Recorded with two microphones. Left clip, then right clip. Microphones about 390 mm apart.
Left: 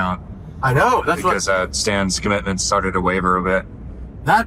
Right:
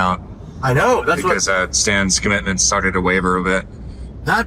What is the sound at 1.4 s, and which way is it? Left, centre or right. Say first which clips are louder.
Speech: right 2 dB; centre.